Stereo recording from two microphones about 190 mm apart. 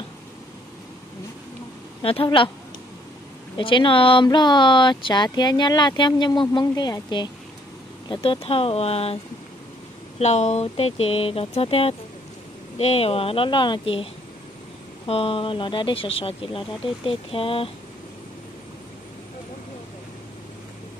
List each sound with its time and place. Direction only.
2.0 s speech: 30° left (ahead or behind)
3.5 s speech: 25° left (ahead or behind)
15.0 s speech: 30° left (ahead or behind)